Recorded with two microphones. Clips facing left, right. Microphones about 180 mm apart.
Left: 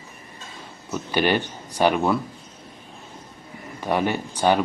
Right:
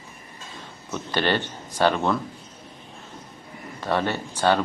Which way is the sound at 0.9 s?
10° left (ahead or behind).